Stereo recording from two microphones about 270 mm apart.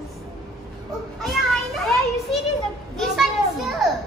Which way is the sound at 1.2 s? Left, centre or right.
Centre.